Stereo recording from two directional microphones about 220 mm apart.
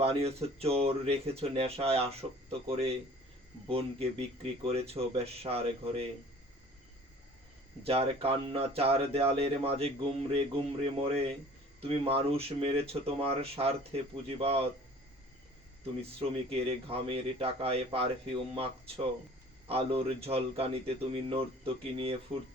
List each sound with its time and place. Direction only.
0.0 s speech: 25° right (ahead or behind)
7.9 s speech: 25° right (ahead or behind)
16.1 s speech: 25° right (ahead or behind)